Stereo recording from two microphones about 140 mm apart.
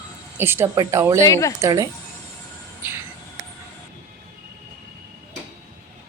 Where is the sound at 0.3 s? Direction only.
15° right (ahead or behind).